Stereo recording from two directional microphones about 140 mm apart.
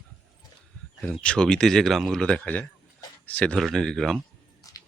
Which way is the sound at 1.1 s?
5° left (ahead or behind).